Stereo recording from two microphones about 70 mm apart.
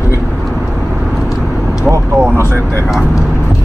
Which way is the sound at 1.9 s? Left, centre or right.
Right.